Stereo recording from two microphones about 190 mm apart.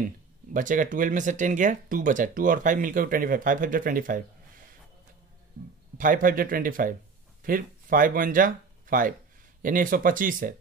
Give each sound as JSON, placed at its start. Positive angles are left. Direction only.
{"t": 0.5, "sound": "speech", "side_deg": -45}
{"t": 5.9, "sound": "speech", "side_deg": -45}